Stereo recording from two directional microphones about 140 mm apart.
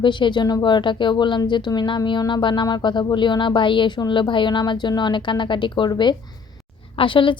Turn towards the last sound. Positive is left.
turn(degrees=35)  # may be behind; listen again after turning